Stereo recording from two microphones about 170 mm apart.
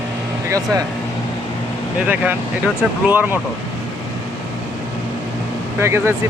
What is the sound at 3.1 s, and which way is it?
Speech, 10° right (ahead or behind).